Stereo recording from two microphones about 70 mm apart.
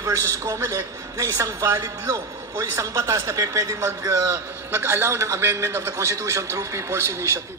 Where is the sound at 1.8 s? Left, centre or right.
Right.